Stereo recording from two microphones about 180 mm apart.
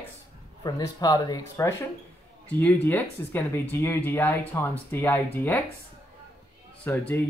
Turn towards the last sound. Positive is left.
turn(degrees=10)  # may be behind; listen again after turning